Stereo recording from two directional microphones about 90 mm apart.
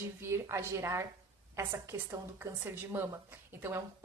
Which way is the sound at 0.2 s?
30° right (ahead or behind).